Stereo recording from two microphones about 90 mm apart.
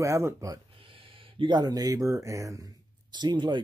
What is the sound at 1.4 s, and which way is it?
Speech, 50° right (ahead or behind).